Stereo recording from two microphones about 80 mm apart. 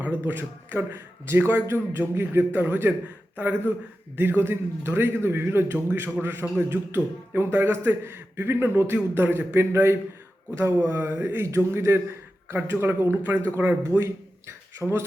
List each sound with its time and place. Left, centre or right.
0.0 s a man's voice: right
4.2 s a man's voice: right